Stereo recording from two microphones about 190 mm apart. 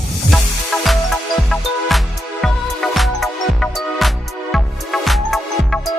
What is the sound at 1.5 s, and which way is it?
Music, centre (ahead or behind).